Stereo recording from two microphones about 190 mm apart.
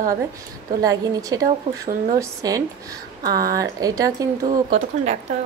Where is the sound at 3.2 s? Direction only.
50° right (ahead or behind).